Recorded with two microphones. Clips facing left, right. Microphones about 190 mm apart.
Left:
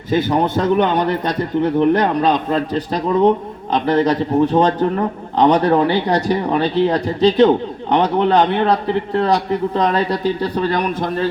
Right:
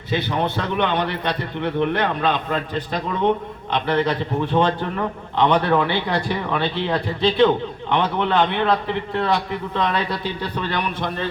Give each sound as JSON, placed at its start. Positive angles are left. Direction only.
{"t": 0.1, "sound": "a man's voice", "side_deg": 45}